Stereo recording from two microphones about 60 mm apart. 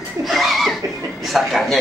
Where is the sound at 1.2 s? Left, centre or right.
Centre.